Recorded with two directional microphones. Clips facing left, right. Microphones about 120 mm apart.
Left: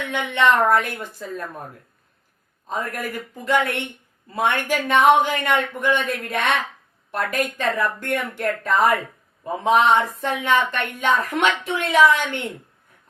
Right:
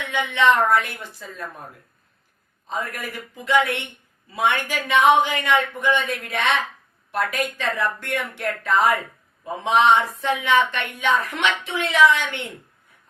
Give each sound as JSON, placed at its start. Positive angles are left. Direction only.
{"t": 0.1, "sound": "speech", "side_deg": 45}
{"t": 2.6, "sound": "speech", "side_deg": 45}